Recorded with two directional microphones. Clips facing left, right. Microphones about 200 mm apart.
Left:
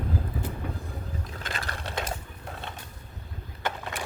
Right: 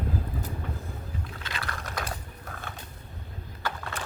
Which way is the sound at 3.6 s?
15° left (ahead or behind).